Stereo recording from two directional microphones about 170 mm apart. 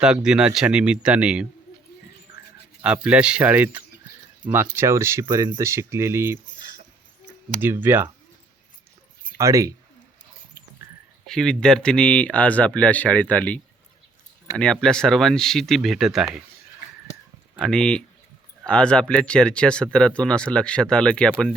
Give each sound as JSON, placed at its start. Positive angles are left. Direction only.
{"t": 0.0, "sound": "speech", "side_deg": -5}
{"t": 2.3, "sound": "a sound", "side_deg": -20}
{"t": 2.8, "sound": "speech", "side_deg": -5}
{"t": 7.6, "sound": "speech", "side_deg": -10}
{"t": 9.4, "sound": "speech", "side_deg": -20}
{"t": 11.3, "sound": "speech", "side_deg": 5}
{"t": 17.6, "sound": "speech", "side_deg": 5}